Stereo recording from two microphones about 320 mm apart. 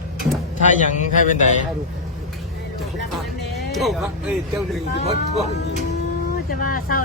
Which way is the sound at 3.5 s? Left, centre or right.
Centre.